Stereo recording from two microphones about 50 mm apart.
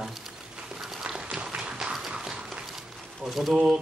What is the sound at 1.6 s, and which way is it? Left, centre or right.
Run, centre.